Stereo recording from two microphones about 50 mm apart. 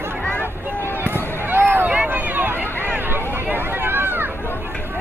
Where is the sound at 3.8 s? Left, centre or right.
Right.